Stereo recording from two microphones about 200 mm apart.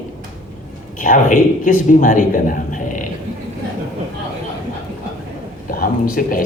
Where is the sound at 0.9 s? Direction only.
40° left (ahead or behind).